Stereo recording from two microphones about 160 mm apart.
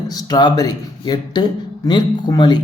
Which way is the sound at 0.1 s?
25° left (ahead or behind).